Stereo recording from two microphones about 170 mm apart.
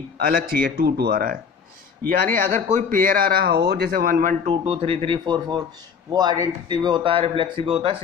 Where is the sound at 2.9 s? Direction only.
55° right (ahead or behind).